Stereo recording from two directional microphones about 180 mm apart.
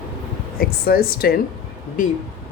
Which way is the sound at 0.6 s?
55° left (ahead or behind).